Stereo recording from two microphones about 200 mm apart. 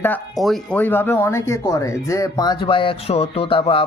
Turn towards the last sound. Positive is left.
turn(degrees=25)  # may be behind; listen again after turning